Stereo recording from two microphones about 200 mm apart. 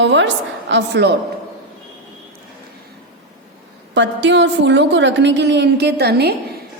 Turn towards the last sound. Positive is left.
turn(degrees=-55)  # may be behind; listen again after turning